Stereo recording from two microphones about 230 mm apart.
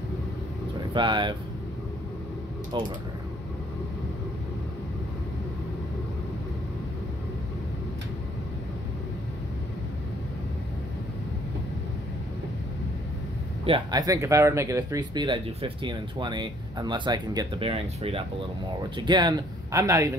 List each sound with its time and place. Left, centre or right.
0.9 s speech: centre
13.7 s speech: centre